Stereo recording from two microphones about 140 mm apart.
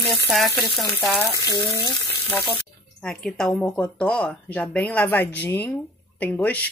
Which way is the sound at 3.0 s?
5° left (ahead or behind).